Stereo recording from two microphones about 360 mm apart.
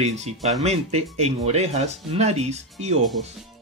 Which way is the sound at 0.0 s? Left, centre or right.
Centre.